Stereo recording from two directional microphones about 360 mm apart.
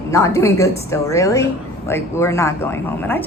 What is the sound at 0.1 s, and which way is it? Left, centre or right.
A woman's voice, centre.